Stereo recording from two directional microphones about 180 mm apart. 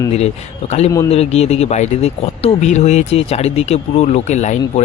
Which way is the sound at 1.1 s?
35° left (ahead or behind).